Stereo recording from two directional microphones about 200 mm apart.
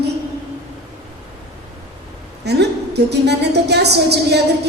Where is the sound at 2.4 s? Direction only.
55° right (ahead or behind).